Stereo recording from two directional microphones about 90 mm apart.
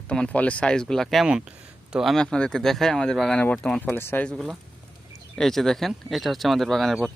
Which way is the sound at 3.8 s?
25° left (ahead or behind).